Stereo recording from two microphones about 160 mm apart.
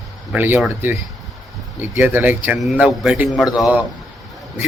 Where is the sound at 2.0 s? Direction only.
10° right (ahead or behind).